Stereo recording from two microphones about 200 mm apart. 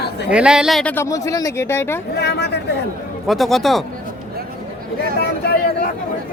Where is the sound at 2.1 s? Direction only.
55° left (ahead or behind).